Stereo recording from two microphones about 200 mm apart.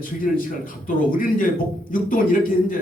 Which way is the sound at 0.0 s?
45° left (ahead or behind).